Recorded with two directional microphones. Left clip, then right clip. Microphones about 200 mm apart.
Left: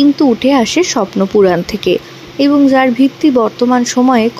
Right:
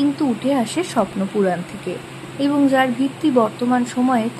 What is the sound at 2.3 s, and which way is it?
Speech, 30° left (ahead or behind).